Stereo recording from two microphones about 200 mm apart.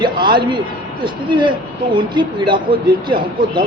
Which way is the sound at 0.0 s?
25° right (ahead or behind).